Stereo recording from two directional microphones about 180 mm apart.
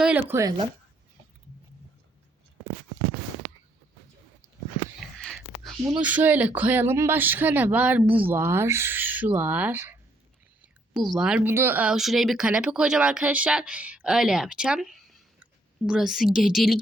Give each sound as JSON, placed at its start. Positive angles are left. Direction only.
{"t": 0.0, "sound": "a woman's voice", "side_deg": -10}
{"t": 4.9, "sound": "whispering", "side_deg": 0}
{"t": 5.9, "sound": "a woman's voice", "side_deg": -10}